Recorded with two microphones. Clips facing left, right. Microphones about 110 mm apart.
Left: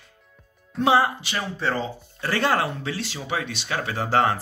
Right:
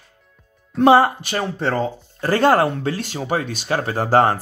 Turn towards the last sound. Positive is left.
turn(degrees=-45)  # may be behind; listen again after turning